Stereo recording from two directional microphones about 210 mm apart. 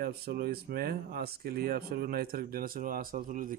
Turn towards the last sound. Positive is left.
turn(degrees=-40)  # may be behind; listen again after turning